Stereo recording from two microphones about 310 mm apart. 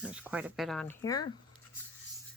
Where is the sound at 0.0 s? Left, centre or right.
Centre.